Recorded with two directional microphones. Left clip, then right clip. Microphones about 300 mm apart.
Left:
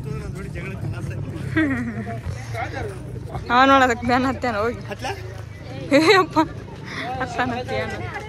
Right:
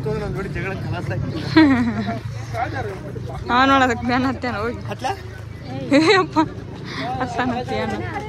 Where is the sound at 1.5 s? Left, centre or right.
Centre.